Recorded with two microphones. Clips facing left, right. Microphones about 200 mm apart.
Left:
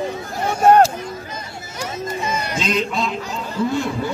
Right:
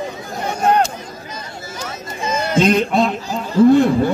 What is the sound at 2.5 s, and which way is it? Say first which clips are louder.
A man's voice: right 10 dB; 55° right (ahead or behind).